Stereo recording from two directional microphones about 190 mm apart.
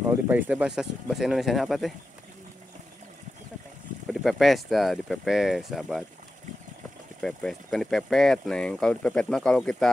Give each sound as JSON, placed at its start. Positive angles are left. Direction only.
{"t": 0.1, "sound": "speech", "side_deg": -10}
{"t": 4.1, "sound": "speech", "side_deg": 0}
{"t": 7.2, "sound": "speech", "side_deg": 0}